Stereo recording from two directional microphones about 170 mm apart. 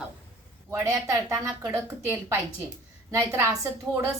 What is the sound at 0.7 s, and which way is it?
A woman's voice, 15° right (ahead or behind).